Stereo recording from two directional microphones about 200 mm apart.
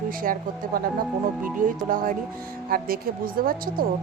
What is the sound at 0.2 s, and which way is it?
Speech, 45° right (ahead or behind).